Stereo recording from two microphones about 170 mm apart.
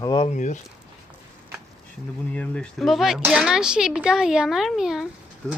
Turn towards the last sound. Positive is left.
turn(degrees=5)  # may be behind; listen again after turning